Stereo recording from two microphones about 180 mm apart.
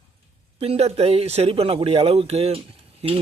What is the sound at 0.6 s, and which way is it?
Speech, 35° right (ahead or behind).